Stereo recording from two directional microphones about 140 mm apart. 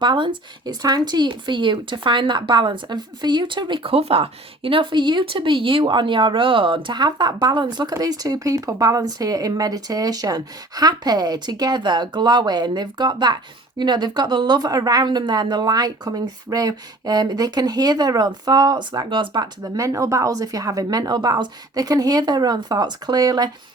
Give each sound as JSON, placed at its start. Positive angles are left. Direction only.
{"t": 0.0, "sound": "speech", "side_deg": -35}